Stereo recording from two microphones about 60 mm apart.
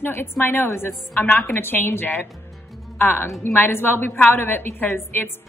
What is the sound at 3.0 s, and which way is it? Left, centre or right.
A woman's voice, left.